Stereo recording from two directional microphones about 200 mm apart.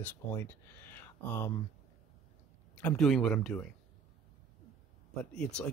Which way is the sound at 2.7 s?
5° left (ahead or behind).